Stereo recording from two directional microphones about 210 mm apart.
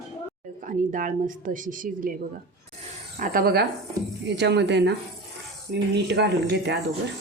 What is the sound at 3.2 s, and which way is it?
Speech, 45° right (ahead or behind).